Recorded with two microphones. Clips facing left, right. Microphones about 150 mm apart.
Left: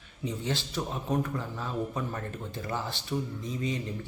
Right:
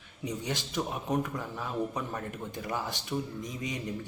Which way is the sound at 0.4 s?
15° right (ahead or behind).